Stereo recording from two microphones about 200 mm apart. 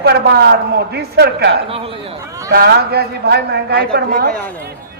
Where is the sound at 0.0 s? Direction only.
55° right (ahead or behind).